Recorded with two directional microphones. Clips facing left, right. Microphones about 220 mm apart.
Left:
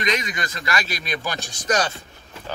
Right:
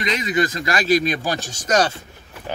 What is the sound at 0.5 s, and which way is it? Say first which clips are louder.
Speech: right 9 dB; 45° right (ahead or behind).